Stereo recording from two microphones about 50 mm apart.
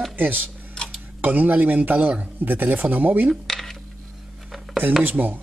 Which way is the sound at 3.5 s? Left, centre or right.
Centre.